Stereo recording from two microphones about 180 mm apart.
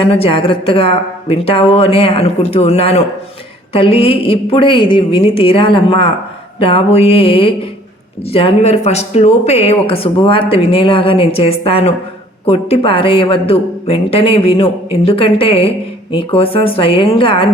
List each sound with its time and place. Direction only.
0.1 s speech: 30° left (ahead or behind)